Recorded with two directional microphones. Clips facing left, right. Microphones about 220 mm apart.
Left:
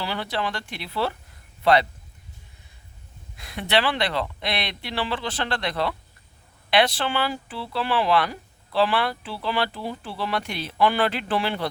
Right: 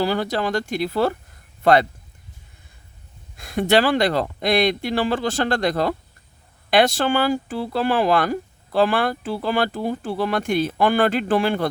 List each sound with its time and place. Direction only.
0.0 s speech: 45° right (ahead or behind)
3.3 s speech: 45° right (ahead or behind)